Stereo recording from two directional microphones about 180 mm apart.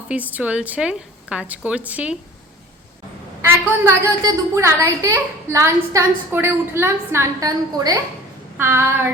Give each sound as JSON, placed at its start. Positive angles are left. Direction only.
{"t": 0.1, "sound": "a woman's voice", "side_deg": -10}
{"t": 3.4, "sound": "a woman's voice", "side_deg": -15}